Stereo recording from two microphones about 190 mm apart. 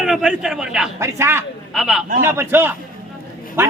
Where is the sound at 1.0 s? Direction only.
15° right (ahead or behind).